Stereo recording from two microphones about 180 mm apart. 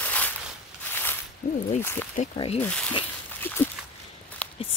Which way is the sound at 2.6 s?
5° left (ahead or behind).